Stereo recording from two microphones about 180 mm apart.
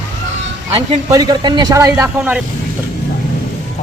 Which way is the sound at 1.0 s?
20° right (ahead or behind).